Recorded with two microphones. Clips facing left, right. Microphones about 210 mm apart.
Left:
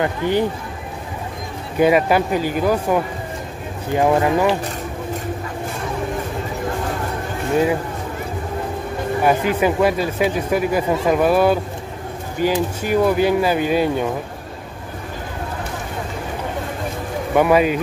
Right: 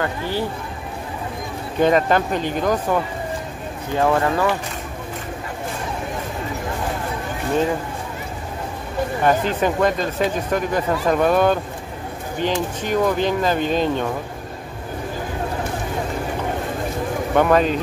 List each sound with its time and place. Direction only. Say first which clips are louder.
0.0 s speech: left 5 dB; 20° left (ahead or behind)
1.8 s speech: left 2 dB; 10° left (ahead or behind)
9.2 s speech: left 2 dB; 10° left (ahead or behind)
17.4 s speech: left 2 dB; 10° left (ahead or behind)